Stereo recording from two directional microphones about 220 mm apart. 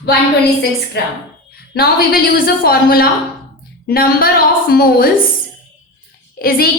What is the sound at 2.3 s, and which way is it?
A woman's voice, 40° left (ahead or behind).